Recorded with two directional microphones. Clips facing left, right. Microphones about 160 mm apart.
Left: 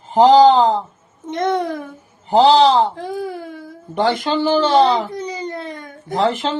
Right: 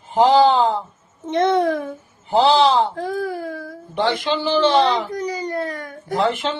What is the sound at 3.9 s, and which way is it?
Speech, 45° left (ahead or behind).